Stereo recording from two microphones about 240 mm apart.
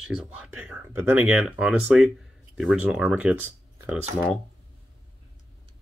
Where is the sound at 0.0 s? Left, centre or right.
Centre.